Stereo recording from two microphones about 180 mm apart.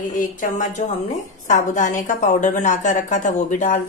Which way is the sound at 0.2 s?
45° left (ahead or behind).